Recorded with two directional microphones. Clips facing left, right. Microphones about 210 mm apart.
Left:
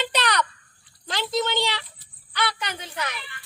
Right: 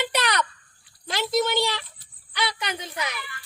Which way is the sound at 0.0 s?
10° right (ahead or behind).